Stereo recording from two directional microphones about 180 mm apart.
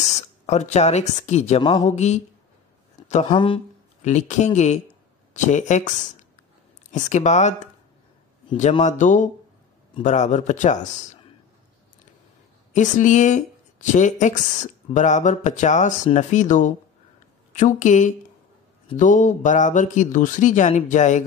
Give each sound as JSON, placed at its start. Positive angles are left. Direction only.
{"t": 0.0, "sound": "speech", "side_deg": 40}
{"t": 1.6, "sound": "speech", "side_deg": 25}
{"t": 1.9, "sound": "speech", "side_deg": 40}
{"t": 3.3, "sound": "speech", "side_deg": 25}
{"t": 4.0, "sound": "speech", "side_deg": 40}
{"t": 8.8, "sound": "speech", "side_deg": 45}
{"t": 12.7, "sound": "speech", "side_deg": 45}